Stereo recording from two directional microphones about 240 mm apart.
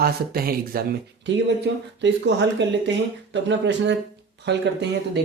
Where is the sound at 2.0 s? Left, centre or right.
Right.